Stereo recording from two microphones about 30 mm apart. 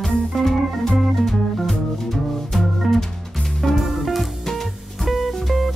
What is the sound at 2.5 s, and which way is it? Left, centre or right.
Music, centre.